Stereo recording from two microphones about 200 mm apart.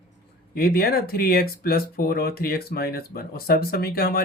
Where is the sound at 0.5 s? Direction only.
50° left (ahead or behind).